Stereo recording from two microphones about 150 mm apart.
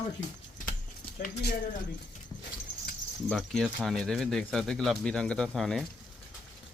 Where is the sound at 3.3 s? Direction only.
5° left (ahead or behind).